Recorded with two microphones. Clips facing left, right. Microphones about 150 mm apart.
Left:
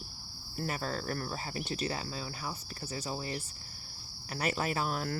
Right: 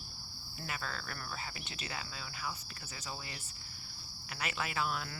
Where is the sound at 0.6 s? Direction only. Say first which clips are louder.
Left 7 dB; 40° left (ahead or behind).